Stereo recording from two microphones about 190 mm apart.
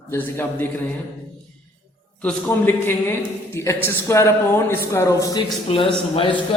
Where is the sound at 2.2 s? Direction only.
10° left (ahead or behind).